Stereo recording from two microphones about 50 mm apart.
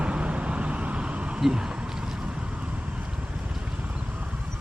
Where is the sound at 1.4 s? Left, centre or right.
Centre.